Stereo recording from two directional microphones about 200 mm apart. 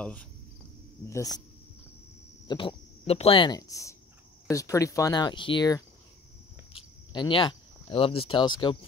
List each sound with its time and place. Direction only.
0.0 s cricket: 5° left (ahead or behind)
1.0 s speech: 15° left (ahead or behind)
2.4 s speech: 25° left (ahead or behind)